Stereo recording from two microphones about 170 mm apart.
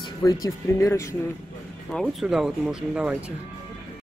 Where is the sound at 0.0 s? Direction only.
20° left (ahead or behind).